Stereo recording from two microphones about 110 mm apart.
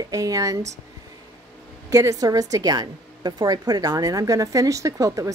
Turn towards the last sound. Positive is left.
turn(degrees=-30)  # may be behind; listen again after turning